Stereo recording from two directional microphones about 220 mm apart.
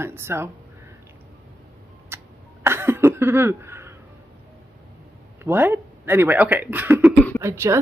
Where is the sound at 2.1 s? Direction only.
10° right (ahead or behind).